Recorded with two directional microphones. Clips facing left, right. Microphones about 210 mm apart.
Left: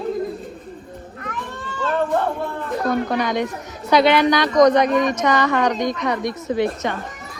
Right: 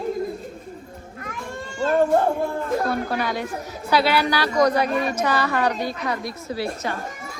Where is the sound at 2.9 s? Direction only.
5° right (ahead or behind).